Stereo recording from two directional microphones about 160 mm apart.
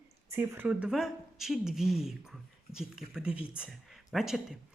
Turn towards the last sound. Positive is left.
turn(degrees=0)  # may be behind; listen again after turning